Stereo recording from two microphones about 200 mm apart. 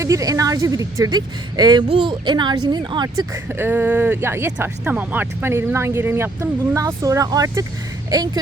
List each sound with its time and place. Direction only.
0.0 s speech: 15° right (ahead or behind)
3.6 s speech: 10° right (ahead or behind)